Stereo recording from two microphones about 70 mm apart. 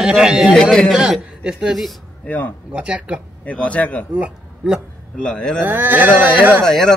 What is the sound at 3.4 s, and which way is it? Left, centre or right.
Speech, centre.